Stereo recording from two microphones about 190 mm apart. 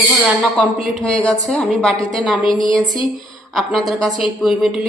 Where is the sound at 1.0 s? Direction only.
Centre (ahead or behind).